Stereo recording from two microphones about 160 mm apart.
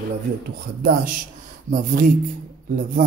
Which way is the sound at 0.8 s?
60° right (ahead or behind).